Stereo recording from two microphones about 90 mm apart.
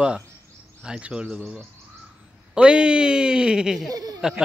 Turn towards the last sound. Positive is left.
turn(degrees=-5)  # may be behind; listen again after turning